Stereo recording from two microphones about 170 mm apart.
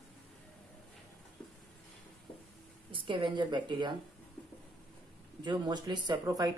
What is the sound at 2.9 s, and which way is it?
A woman's voice, 30° right (ahead or behind).